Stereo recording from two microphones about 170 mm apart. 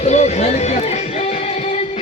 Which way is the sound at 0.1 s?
40° left (ahead or behind).